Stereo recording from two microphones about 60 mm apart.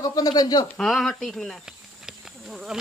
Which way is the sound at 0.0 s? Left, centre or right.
Left.